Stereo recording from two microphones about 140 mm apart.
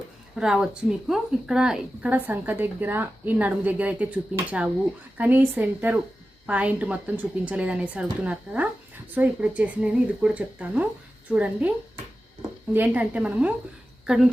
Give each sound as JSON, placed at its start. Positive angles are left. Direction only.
{"t": 0.3, "sound": "a woman's voice", "side_deg": -5}
{"t": 12.7, "sound": "a woman's voice", "side_deg": -10}